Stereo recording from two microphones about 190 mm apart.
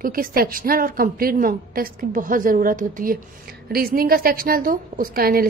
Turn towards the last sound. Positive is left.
turn(degrees=-50)  # may be behind; listen again after turning